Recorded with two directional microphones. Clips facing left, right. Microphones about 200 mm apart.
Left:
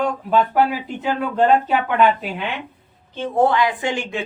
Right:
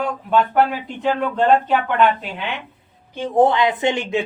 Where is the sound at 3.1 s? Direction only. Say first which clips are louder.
Right 2 dB; 15° right (ahead or behind).